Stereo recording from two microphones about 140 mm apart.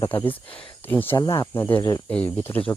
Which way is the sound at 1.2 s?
30° left (ahead or behind).